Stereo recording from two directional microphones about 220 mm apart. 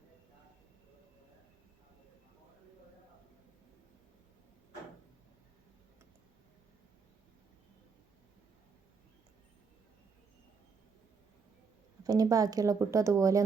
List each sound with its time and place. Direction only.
12.0 s speech: 15° right (ahead or behind)